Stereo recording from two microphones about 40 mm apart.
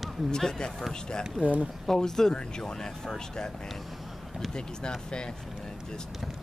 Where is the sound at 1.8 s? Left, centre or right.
Centre.